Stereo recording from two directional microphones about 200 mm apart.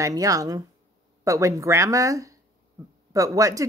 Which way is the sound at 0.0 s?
15° right (ahead or behind).